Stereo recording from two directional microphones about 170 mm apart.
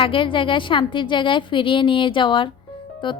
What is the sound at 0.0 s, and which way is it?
Speech, 30° left (ahead or behind).